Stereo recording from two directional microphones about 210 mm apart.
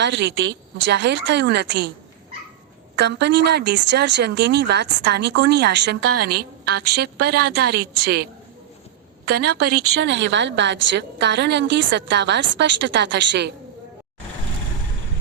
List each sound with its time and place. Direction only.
0.0 s speech: 55° right (ahead or behind)
2.9 s speech: 50° right (ahead or behind)
9.6 s a woman's voice: 90° right; by 13.5 s 55° right (ahead or behind)